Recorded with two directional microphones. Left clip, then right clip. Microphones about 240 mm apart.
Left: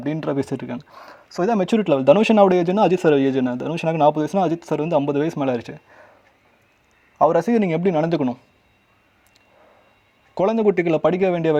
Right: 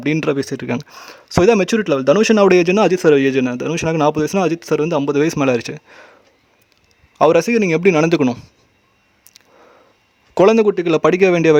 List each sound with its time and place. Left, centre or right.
0.0 s speech: right
0.3 s speech: centre
0.7 s speech: right
1.5 s a man's voice: centre
7.3 s a man's voice: centre
7.9 s speech: right
10.3 s a man's voice: right
10.8 s a man's voice: right